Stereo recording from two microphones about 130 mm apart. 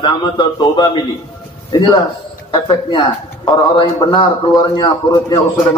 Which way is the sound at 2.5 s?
35° left (ahead or behind).